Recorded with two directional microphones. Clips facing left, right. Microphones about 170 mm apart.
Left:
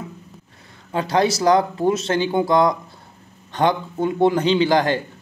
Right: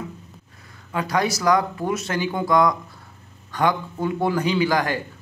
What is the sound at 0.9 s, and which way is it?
Speech, 30° left (ahead or behind).